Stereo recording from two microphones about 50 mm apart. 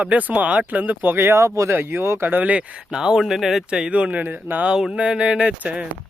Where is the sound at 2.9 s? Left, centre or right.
Centre.